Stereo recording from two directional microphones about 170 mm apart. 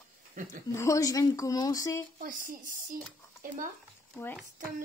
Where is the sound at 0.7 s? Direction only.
15° left (ahead or behind).